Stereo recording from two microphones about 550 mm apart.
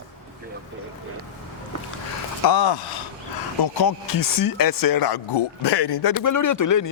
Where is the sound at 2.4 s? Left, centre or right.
Left.